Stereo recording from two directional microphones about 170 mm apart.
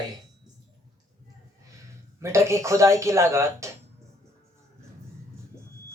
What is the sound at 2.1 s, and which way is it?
Speech, 15° right (ahead or behind).